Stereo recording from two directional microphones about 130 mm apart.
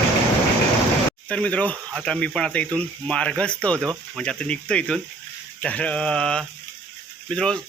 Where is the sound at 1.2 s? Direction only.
10° left (ahead or behind).